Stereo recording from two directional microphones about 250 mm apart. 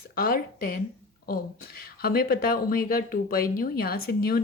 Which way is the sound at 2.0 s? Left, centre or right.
Left.